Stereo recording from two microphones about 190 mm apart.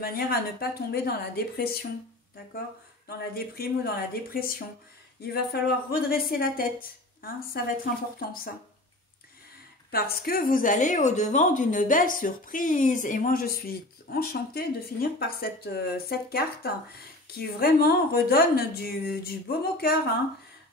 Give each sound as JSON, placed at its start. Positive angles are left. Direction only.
{"t": 0.0, "sound": "a woman's voice", "side_deg": 55}
{"t": 3.1, "sound": "a woman's voice", "side_deg": 55}
{"t": 9.8, "sound": "a woman's voice", "side_deg": 55}